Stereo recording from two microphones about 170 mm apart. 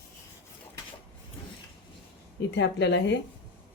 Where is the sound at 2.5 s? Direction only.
90° left.